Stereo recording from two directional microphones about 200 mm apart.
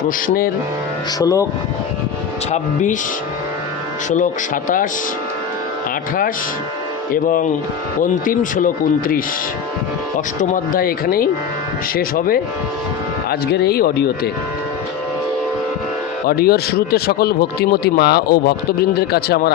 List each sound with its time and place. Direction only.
0.0 s speech: 45° left (ahead or behind)
1.2 s speech: 15° left (ahead or behind)
2.5 s speech: 40° left (ahead or behind)
7.1 s speech: 40° left (ahead or behind)
10.4 s speech: 40° left (ahead or behind)
13.5 s speech: 55° left (ahead or behind)
16.2 s speech: 50° left (ahead or behind)